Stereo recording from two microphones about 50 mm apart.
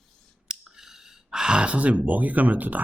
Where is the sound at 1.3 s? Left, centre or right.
Centre; by 2.8 s right.